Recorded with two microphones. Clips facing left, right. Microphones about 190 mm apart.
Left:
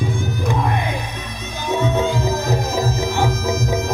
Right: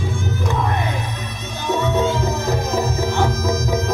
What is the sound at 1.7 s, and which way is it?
Music, 15° left (ahead or behind).